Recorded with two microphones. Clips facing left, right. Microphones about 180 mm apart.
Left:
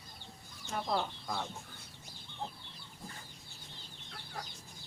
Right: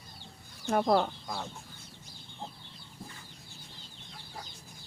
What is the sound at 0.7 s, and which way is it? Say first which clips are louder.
Speech: right 9 dB; 60° right (ahead or behind).